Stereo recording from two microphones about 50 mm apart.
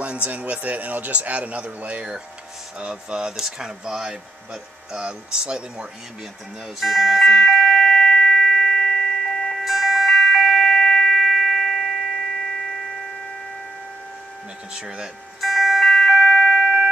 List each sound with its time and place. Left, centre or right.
0.0 s a man's voice: right
6.8 s music: centre
9.6 s music: centre
14.7 s speech: centre
15.4 s music: centre